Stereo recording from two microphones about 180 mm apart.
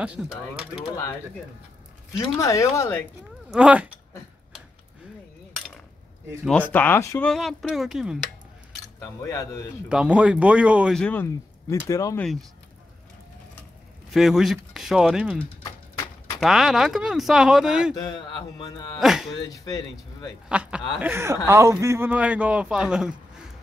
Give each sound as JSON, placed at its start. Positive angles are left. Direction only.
{"t": 0.0, "sound": "a man's voice", "side_deg": -5}
{"t": 2.1, "sound": "speech", "side_deg": 15}
{"t": 3.5, "sound": "a man's voice", "side_deg": -5}
{"t": 6.7, "sound": "speech", "side_deg": 10}
{"t": 7.2, "sound": "speech", "side_deg": 0}
{"t": 9.3, "sound": "speech", "side_deg": 20}
{"t": 9.8, "sound": "speech", "side_deg": -5}
{"t": 11.0, "sound": "speech", "side_deg": 10}
{"t": 12.2, "sound": "speech", "side_deg": 0}
{"t": 14.1, "sound": "speech", "side_deg": 0}
{"t": 17.9, "sound": "speech", "side_deg": 25}
{"t": 18.9, "sound": "speech", "side_deg": 0}
{"t": 19.3, "sound": "speech", "side_deg": 20}
{"t": 20.4, "sound": "a man's voice", "side_deg": -5}